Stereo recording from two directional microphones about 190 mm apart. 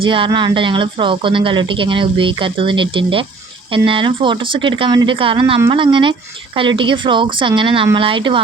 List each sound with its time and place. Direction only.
0.0 s speech: 25° right (ahead or behind)